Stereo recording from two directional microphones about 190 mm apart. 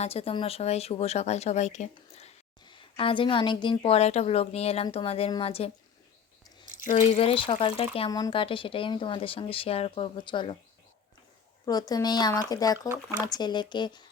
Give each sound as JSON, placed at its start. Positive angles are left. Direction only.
{"t": 0.0, "sound": "a woman's voice", "side_deg": 30}
{"t": 6.9, "sound": "speech", "side_deg": 30}
{"t": 11.6, "sound": "speech", "side_deg": 20}